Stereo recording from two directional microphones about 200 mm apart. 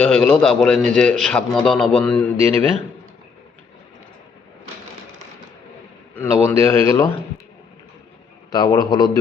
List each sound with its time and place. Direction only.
0.0 s a man's voice: 5° left (ahead or behind)
6.1 s speech: 15° left (ahead or behind)
8.5 s a man's voice: 20° left (ahead or behind)